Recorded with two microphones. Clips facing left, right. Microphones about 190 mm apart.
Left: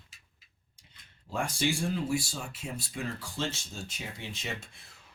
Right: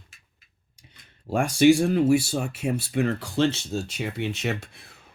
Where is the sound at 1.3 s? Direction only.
75° right (ahead or behind).